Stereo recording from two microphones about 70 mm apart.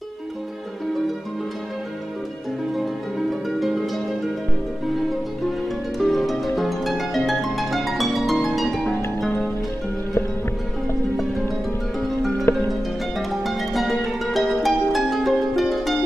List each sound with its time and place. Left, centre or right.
3.4 s harp: centre
5.9 s harp: centre
12.5 s music: left
13.4 s music: centre
14.5 s harp: centre